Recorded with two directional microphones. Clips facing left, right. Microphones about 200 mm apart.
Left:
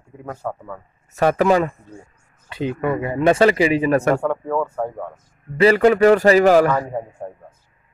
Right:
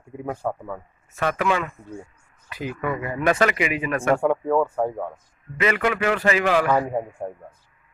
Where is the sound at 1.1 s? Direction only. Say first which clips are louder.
Left 7 dB; 40° left (ahead or behind).